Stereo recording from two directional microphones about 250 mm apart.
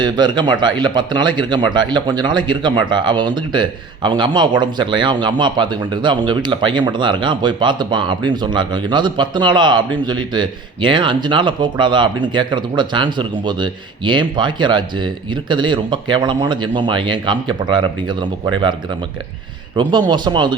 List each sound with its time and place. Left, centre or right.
0.0 s speech: centre